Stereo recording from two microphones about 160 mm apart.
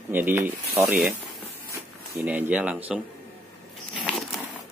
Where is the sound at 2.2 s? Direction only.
10° right (ahead or behind).